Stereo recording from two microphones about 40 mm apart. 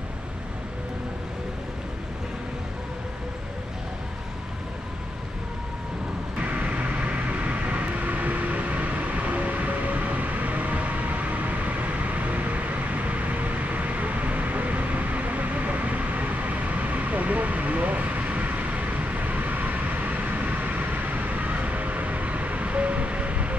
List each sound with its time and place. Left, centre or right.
6.4 s vehicle: right